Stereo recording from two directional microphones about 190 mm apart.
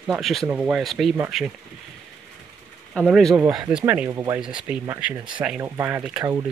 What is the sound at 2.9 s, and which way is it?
Speech, centre (ahead or behind).